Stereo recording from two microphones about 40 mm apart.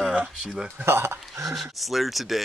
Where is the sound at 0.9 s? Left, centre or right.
Right.